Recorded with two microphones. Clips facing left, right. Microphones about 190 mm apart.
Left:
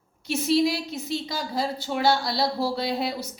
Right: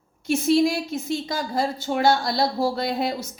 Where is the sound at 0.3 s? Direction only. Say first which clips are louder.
Right 3 dB; 50° right (ahead or behind).